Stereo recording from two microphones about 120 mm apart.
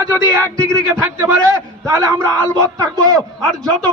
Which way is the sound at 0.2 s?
15° right (ahead or behind).